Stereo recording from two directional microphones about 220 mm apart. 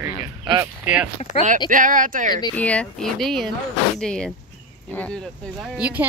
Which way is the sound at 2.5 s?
5° left (ahead or behind).